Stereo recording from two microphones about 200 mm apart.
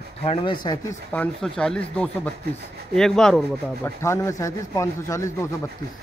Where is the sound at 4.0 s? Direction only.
15° left (ahead or behind).